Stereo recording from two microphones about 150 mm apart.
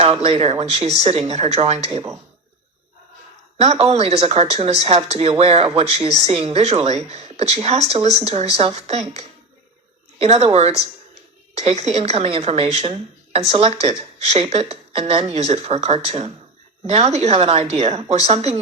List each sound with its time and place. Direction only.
0.0 s a woman's voice: 45° right (ahead or behind)
3.6 s a woman's voice: 45° right (ahead or behind)